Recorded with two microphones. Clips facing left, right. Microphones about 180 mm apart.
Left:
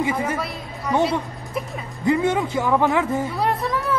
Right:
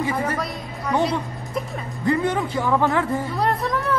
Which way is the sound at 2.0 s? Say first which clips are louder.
Left 2 dB; 20° left (ahead or behind).